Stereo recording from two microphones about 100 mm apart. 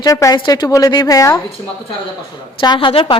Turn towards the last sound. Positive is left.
turn(degrees=60)  # may be behind; listen again after turning